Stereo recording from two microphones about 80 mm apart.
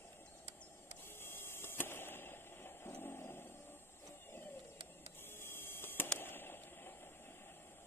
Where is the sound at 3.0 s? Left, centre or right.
Left.